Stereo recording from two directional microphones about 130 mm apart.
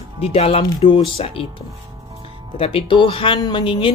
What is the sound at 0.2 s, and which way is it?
A woman's voice, 50° left (ahead or behind).